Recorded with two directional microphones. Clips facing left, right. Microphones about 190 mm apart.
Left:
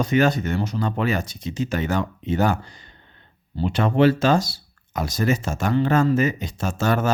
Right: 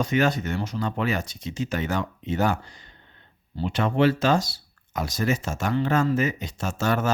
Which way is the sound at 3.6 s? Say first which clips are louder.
Left 3 dB; 35° left (ahead or behind).